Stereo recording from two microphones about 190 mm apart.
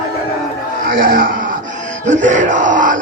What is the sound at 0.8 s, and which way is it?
Speech, 50° right (ahead or behind).